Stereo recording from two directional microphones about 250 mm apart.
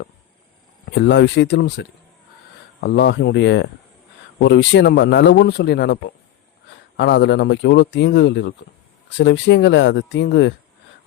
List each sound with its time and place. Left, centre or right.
0.9 s a man's voice: left